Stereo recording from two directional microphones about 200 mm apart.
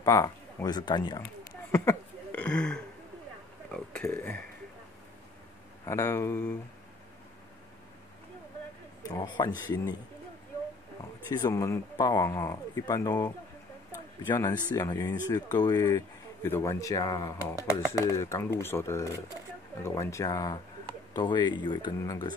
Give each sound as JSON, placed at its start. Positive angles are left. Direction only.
{"t": 0.0, "sound": "speech", "side_deg": 15}
{"t": 1.7, "sound": "a sound", "side_deg": 10}
{"t": 3.7, "sound": "speech", "side_deg": 5}
{"t": 5.9, "sound": "speech", "side_deg": 15}
{"t": 9.0, "sound": "speech", "side_deg": 15}
{"t": 11.2, "sound": "speech", "side_deg": 15}
{"t": 13.9, "sound": "a sound", "side_deg": 10}
{"t": 14.8, "sound": "speech", "side_deg": 15}